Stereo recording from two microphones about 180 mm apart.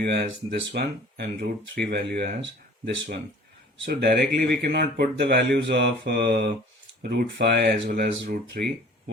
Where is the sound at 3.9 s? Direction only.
65° right (ahead or behind).